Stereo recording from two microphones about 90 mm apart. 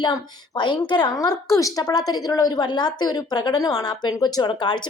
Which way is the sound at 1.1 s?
50° left (ahead or behind).